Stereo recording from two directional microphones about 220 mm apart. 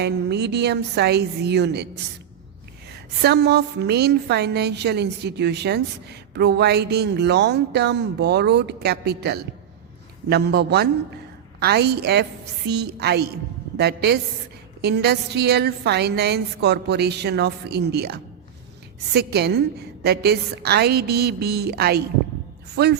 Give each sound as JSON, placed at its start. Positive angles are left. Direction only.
{"t": 0.0, "sound": "a woman's voice", "side_deg": -50}
{"t": 2.9, "sound": "a woman's voice", "side_deg": -50}